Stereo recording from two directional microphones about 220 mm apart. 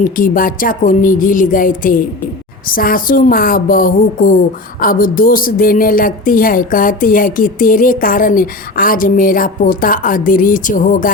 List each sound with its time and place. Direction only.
0.0 s a woman's voice: 40° left (ahead or behind)